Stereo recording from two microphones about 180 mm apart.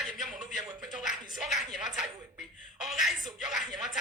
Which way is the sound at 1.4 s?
Centre (ahead or behind).